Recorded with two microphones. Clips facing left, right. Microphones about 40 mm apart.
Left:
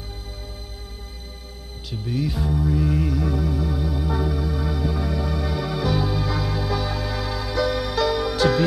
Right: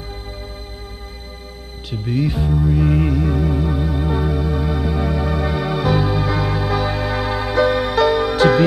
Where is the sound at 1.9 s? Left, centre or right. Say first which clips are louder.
Right 5 dB; right.